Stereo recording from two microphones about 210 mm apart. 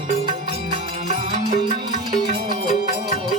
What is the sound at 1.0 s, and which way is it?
Music, 30° right (ahead or behind).